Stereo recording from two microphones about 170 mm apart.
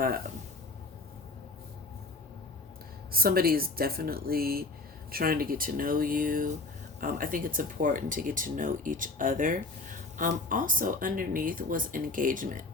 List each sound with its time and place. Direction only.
3.1 s speech: 60° right (ahead or behind)